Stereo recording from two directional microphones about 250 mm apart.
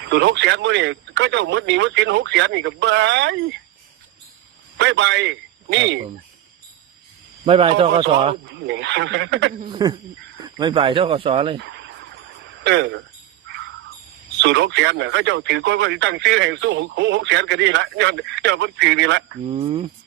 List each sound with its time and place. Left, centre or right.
0.1 s speech: right
4.8 s a man's voice: right
7.4 s speech: right
8.4 s speech: right
9.6 s a sound: centre
10.4 s speech: centre
11.6 s a sound: right
12.6 s speech: right
14.4 s speech: right
19.5 s speech: right